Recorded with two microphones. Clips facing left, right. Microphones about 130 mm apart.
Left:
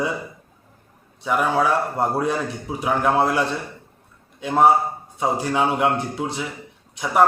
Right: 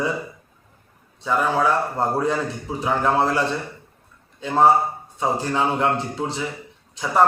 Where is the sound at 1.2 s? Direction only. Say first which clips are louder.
Even; 15° left (ahead or behind).